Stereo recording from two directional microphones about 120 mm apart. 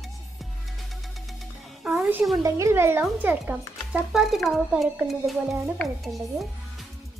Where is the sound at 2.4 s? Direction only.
25° right (ahead or behind).